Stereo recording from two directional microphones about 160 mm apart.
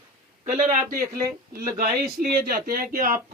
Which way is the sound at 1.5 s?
70° right (ahead or behind).